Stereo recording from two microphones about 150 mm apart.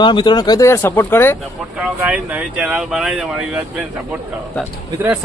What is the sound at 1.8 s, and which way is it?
Speech, 10° right (ahead or behind).